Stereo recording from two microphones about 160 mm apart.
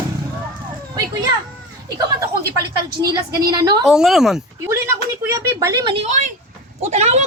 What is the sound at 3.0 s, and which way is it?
Speech, 25° right (ahead or behind).